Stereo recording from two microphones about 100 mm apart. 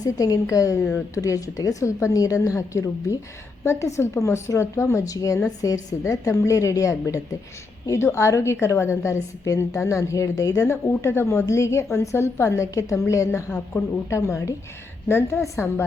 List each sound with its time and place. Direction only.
0.0 s a woman's voice: 35° left (ahead or behind)